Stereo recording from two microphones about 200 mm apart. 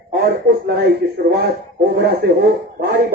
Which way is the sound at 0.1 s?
50° right (ahead or behind).